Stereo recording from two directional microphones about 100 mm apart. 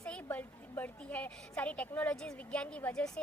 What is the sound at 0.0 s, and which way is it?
A woman's voice, 15° left (ahead or behind).